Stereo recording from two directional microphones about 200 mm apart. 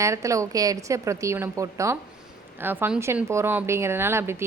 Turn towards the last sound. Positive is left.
turn(degrees=-10)  # may be behind; listen again after turning